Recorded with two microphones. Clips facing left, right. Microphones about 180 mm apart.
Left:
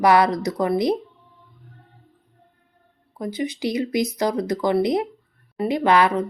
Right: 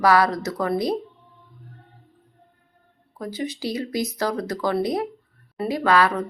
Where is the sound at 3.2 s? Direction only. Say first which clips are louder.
Left 3 dB; 20° left (ahead or behind).